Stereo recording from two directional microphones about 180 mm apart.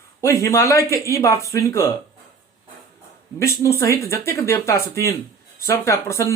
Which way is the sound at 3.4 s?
15° left (ahead or behind).